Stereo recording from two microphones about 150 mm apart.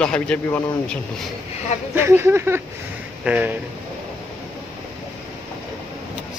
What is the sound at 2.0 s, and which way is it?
Speech, 15° right (ahead or behind).